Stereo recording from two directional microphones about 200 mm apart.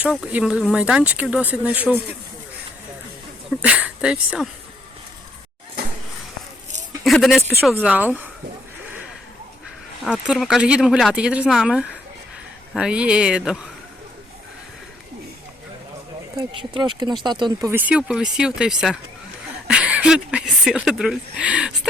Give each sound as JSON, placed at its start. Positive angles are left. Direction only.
{"t": 0.0, "sound": "speech", "side_deg": -5}
{"t": 3.6, "sound": "speech", "side_deg": -5}
{"t": 7.0, "sound": "speech", "side_deg": 0}
{"t": 10.0, "sound": "speech", "side_deg": 0}
{"t": 16.3, "sound": "speech", "side_deg": -20}
{"t": 17.7, "sound": "speech", "side_deg": -10}